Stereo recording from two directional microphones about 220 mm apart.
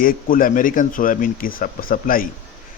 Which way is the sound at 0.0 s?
40° left (ahead or behind).